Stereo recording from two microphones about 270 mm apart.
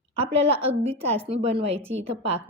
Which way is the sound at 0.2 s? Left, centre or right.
Right.